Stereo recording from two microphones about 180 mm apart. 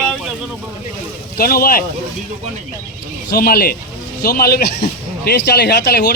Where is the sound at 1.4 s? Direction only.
55° left (ahead or behind).